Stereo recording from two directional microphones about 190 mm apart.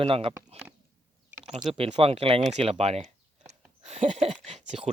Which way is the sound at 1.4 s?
30° right (ahead or behind).